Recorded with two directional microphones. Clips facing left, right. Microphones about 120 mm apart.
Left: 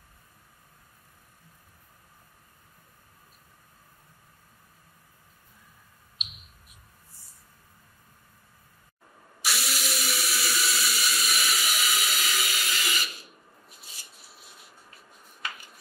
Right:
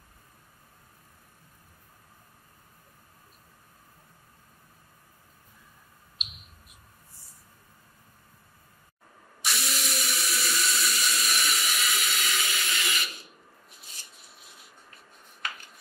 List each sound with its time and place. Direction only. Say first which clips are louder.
9.4 s sink: left 1 dB; centre (ahead or behind)